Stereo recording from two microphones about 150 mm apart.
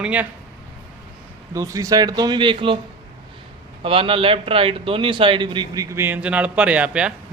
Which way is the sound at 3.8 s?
35° right (ahead or behind).